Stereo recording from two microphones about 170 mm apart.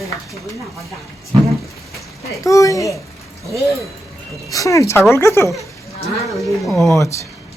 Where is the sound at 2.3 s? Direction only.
20° left (ahead or behind).